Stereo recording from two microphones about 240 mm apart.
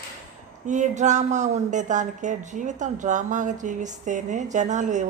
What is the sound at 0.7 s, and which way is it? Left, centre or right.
Speech, right.